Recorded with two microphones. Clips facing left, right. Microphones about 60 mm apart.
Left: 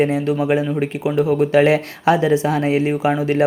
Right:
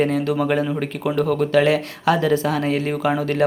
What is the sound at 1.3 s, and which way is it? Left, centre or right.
Speech, left.